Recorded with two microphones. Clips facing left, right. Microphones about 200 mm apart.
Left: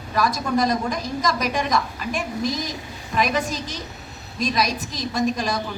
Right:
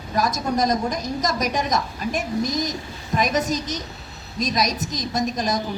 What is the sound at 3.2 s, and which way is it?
A woman's voice, 40° right (ahead or behind).